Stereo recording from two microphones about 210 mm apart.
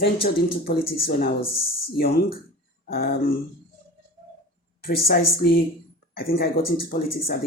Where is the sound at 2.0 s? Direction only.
45° left (ahead or behind).